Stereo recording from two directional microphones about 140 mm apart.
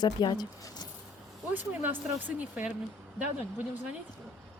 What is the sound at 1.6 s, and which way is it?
Speech, 10° right (ahead or behind).